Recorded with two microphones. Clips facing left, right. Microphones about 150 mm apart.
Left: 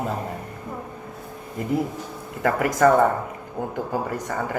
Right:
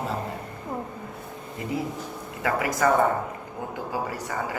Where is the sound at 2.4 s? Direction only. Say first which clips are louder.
Left 5 dB; 45° left (ahead or behind).